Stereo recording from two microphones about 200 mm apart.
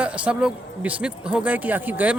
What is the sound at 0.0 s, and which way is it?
Speech, 5° right (ahead or behind).